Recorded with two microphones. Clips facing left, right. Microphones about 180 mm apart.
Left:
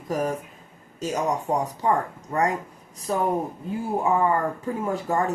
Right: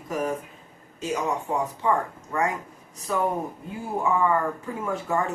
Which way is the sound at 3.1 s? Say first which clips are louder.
Left 2 dB; 40° left (ahead or behind).